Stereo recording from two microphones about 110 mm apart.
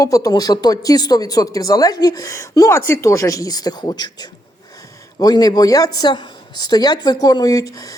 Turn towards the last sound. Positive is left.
turn(degrees=35)  # may be behind; listen again after turning